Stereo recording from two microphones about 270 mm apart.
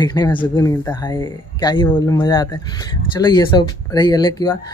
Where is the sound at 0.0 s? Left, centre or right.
Centre.